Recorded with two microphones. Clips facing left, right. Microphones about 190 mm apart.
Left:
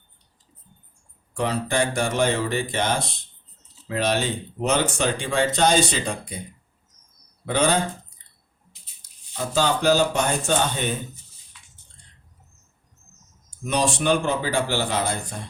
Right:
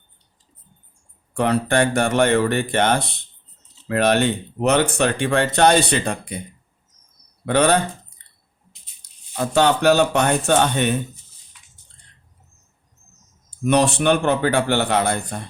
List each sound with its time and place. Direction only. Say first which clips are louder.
1.3 s speech: right 5 dB; 60° right (ahead or behind)
7.4 s speech: right 5 dB; 65° right (ahead or behind)
9.0 s speech: right 6 dB; 65° right (ahead or behind)
13.7 s speech: right 5 dB; 60° right (ahead or behind)